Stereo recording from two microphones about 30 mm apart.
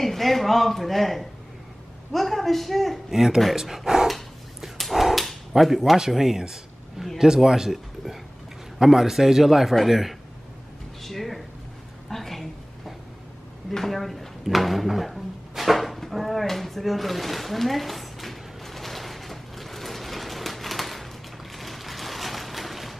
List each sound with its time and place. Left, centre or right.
0.0 s speech: centre
3.1 s a man's voice: centre
3.8 s speech: right
4.1 s dog: centre
5.5 s a man's voice: centre
7.0 s a man's voice: right
7.7 s a man's voice: centre
11.0 s a sound: centre